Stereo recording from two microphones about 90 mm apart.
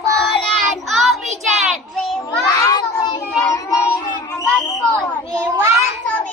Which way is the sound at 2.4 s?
45° left (ahead or behind).